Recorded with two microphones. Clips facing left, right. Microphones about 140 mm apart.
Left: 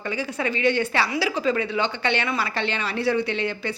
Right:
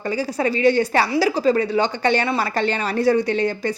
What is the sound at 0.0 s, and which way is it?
Speech, 40° right (ahead or behind).